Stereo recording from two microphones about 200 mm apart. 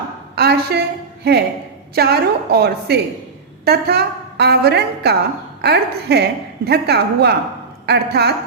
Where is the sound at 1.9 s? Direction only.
50° right (ahead or behind).